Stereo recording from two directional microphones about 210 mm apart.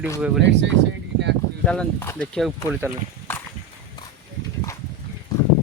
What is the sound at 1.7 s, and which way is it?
Speech, 10° left (ahead or behind).